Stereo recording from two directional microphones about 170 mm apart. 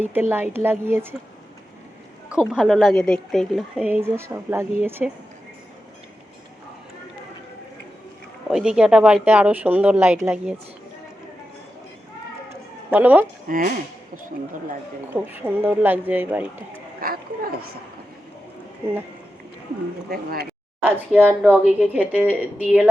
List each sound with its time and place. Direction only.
0.0 s speech: 10° right (ahead or behind)
2.3 s a woman's voice: 5° right (ahead or behind)
8.4 s speech: 5° right (ahead or behind)
12.9 s speech: 10° right (ahead or behind)
13.5 s speech: 55° right (ahead or behind)
15.1 s speech: 10° right (ahead or behind)
17.0 s a sound: 60° right (ahead or behind)
20.1 s speech: 60° right (ahead or behind)
20.8 s speech: 10° right (ahead or behind)